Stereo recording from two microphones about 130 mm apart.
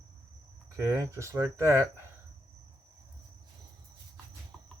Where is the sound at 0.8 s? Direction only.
20° right (ahead or behind).